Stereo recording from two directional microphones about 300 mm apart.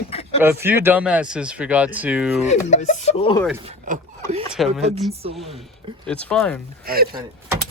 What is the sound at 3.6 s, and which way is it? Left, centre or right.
Speech, right.